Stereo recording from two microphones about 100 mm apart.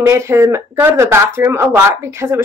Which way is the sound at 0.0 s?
25° right (ahead or behind).